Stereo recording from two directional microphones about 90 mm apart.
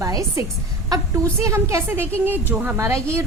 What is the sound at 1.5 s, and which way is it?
Speech, 30° right (ahead or behind).